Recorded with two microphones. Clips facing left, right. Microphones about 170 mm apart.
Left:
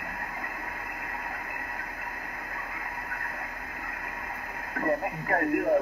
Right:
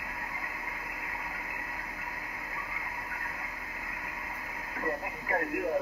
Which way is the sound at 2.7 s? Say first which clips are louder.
Left 3 dB; 55° left (ahead or behind).